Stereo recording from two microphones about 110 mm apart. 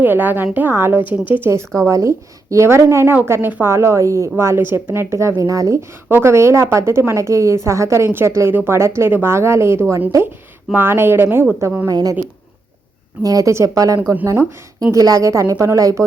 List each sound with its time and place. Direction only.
0.0 s a woman's voice: 15° right (ahead or behind)
11.9 s speech: 35° right (ahead or behind)
13.2 s a woman's voice: 30° right (ahead or behind)